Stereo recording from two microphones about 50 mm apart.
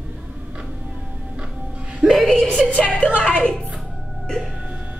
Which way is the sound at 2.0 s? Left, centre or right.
Centre.